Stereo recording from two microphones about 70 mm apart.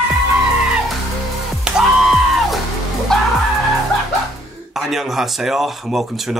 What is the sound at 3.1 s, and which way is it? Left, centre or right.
Vehicle, centre.